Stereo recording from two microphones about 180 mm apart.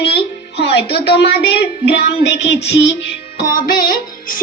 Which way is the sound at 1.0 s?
65° left (ahead or behind).